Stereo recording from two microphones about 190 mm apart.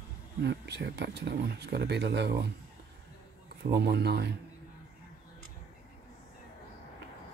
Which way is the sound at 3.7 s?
60° right (ahead or behind).